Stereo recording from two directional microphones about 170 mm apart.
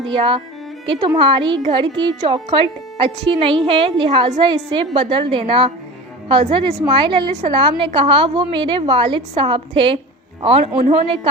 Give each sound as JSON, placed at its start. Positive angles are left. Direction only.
{"t": 0.1, "sound": "a woman's voice", "side_deg": -30}